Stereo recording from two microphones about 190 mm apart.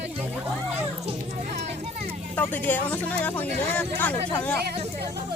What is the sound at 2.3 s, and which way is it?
Speech, 10° left (ahead or behind).